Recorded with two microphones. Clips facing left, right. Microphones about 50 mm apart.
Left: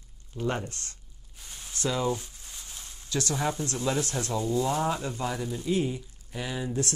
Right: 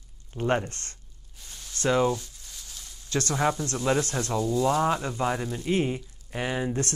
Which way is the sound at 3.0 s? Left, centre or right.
Right.